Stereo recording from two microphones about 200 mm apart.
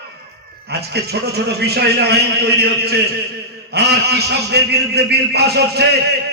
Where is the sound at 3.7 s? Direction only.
55° right (ahead or behind).